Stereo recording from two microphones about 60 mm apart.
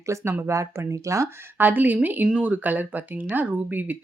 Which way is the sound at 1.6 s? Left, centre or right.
Right.